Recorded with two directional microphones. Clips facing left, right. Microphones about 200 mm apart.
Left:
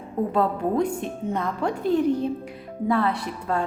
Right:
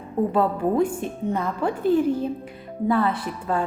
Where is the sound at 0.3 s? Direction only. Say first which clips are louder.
Right 1 dB; 5° right (ahead or behind).